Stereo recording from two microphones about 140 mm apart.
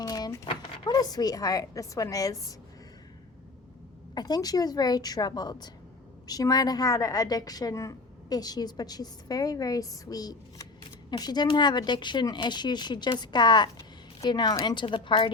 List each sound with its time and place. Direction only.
0.0 s a sound: 25° left (ahead or behind)
0.9 s a woman's voice: 30° left (ahead or behind)
4.1 s a woman's voice: 30° left (ahead or behind)